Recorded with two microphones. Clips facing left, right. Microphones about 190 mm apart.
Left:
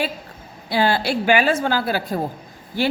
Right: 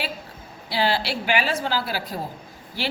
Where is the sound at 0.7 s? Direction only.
50° left (ahead or behind).